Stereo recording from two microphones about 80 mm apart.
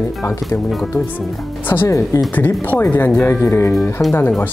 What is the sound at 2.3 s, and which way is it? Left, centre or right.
Speech, left.